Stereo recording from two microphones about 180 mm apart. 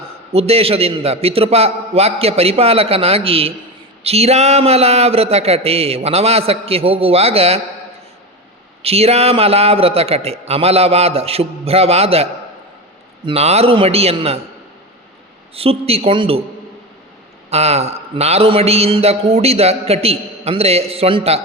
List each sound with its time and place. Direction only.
0.3 s a man's voice: 35° right (ahead or behind)
8.8 s a man's voice: 35° right (ahead or behind)
15.5 s a man's voice: 35° right (ahead or behind)
17.5 s a man's voice: 35° right (ahead or behind)